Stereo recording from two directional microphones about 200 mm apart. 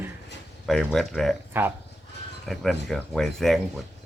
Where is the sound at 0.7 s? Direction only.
Centre (ahead or behind).